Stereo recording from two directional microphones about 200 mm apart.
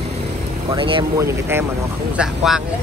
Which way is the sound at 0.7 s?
25° right (ahead or behind).